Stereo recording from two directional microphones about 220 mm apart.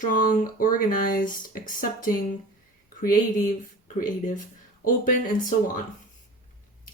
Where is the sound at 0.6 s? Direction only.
40° left (ahead or behind).